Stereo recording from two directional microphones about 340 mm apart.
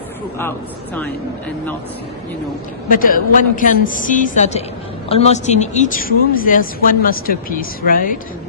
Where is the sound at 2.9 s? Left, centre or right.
Left.